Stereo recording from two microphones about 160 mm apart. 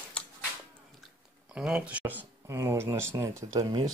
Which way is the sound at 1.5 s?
5° right (ahead or behind).